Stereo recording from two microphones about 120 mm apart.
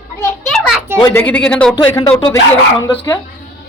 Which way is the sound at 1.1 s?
15° left (ahead or behind).